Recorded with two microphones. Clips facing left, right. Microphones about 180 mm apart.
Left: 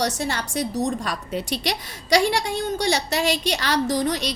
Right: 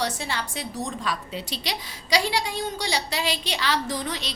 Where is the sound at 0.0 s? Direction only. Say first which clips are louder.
Left 4 dB; 45° left (ahead or behind).